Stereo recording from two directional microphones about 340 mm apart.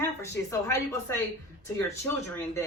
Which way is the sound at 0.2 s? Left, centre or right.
Centre.